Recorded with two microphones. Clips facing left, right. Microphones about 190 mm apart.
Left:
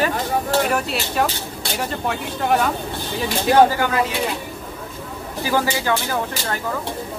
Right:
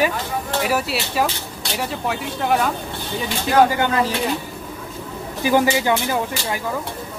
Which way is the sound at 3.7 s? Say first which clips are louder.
Right 1 dB; 30° right (ahead or behind).